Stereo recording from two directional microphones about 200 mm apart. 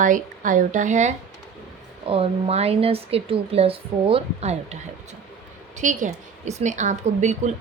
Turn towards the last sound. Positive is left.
turn(degrees=-35)  # may be behind; listen again after turning